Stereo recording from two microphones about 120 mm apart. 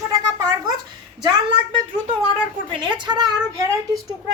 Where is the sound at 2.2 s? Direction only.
45° right (ahead or behind).